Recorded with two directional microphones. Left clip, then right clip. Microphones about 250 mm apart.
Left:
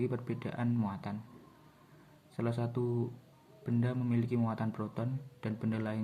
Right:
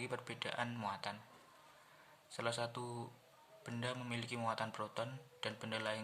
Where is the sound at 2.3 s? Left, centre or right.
Centre.